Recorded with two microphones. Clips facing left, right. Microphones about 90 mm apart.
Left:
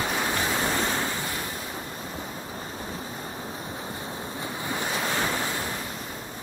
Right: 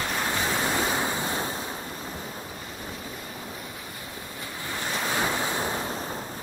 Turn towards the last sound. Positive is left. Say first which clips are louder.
# right 2 dB
turn(degrees=-20)  # may be behind; listen again after turning